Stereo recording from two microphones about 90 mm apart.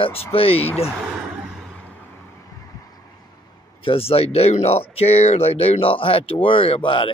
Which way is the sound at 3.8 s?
90° left.